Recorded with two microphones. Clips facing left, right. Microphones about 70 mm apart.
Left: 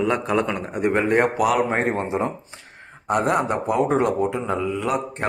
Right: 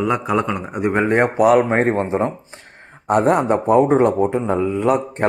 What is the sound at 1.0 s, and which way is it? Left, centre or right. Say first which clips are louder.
Speech: right 6 dB; right.